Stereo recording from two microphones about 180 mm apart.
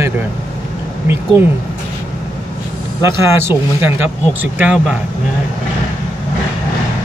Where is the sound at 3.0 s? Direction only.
10° right (ahead or behind).